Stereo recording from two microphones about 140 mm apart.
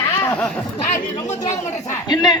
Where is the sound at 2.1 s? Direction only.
30° left (ahead or behind).